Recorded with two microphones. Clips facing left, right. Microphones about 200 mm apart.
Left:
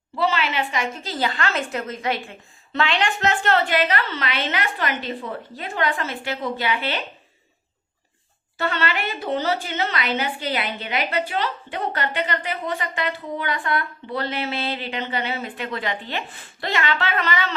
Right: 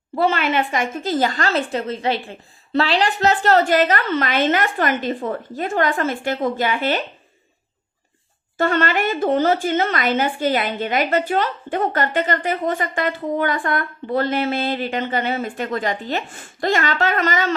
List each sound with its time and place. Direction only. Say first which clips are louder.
0.2 s a woman's voice: right 4 dB; 50° right (ahead or behind)
8.5 s a woman's voice: right 6 dB; 50° right (ahead or behind)